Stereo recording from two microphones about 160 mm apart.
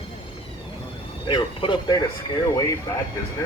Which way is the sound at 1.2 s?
30° left (ahead or behind).